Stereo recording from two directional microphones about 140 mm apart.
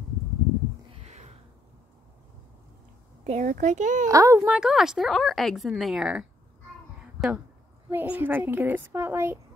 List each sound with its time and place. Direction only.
1.0 s a sound: 55° right (ahead or behind)
3.3 s speech: 70° right (ahead or behind)
4.1 s speech: 25° right (ahead or behind)
4.5 s a woman's voice: 5° right (ahead or behind)